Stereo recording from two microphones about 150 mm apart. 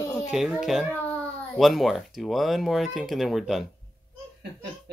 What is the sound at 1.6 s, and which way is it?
Speech, centre (ahead or behind).